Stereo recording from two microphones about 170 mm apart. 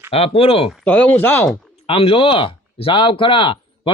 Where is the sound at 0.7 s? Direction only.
5° left (ahead or behind).